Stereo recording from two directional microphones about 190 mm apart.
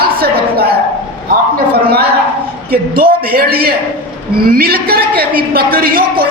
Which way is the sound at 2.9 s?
50° right (ahead or behind).